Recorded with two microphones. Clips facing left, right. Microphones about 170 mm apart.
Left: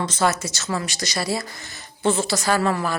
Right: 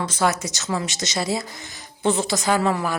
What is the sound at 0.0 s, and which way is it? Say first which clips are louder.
A woman's voice: even; 10° right (ahead or behind).